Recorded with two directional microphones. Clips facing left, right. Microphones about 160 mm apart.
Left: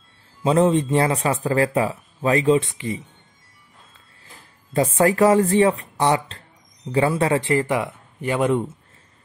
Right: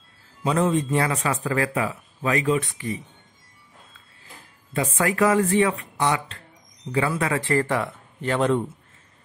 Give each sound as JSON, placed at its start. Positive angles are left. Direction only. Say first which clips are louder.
{"t": 0.4, "sound": "speech", "louder": "left 4 dB", "side_deg": 30}
{"t": 4.7, "sound": "speech", "louder": "left 5 dB", "side_deg": 35}
{"t": 7.4, "sound": "speech", "louder": "left 2 dB", "side_deg": 15}